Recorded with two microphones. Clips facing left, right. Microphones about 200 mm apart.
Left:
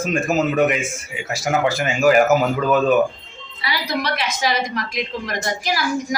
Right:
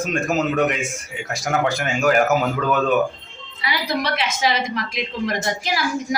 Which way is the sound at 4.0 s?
25° right (ahead or behind).